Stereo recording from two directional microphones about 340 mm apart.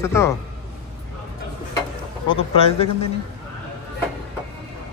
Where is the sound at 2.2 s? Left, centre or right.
Centre.